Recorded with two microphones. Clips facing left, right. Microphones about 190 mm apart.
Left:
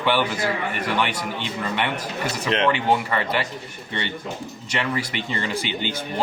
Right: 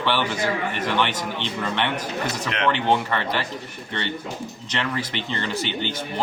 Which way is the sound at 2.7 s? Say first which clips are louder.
Even; 5° left (ahead or behind).